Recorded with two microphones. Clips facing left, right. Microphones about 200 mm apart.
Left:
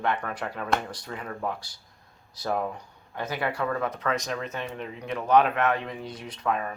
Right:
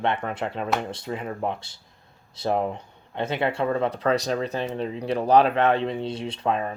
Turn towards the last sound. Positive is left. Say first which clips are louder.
# right 3 dB
turn(degrees=-25)  # may be behind; listen again after turning